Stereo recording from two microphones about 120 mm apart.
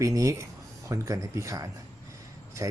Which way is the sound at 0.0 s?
25° right (ahead or behind).